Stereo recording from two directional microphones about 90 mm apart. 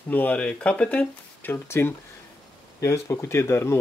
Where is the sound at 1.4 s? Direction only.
25° left (ahead or behind).